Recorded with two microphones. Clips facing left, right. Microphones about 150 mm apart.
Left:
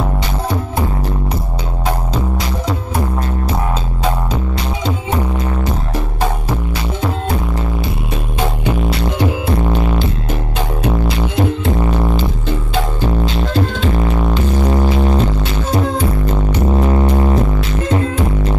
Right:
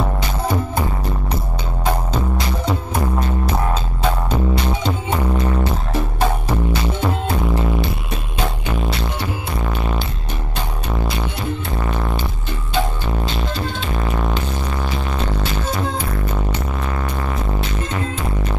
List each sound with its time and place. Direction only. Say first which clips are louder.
14.7 s music: left 9 dB; 25° left (ahead or behind)
16.7 s music: left 10 dB; 30° left (ahead or behind)